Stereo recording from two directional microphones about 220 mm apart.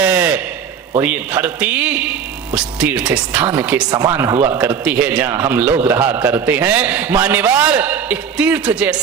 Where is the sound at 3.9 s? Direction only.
15° right (ahead or behind).